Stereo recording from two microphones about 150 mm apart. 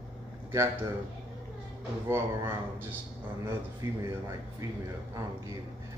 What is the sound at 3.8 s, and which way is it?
Speech, 20° right (ahead or behind).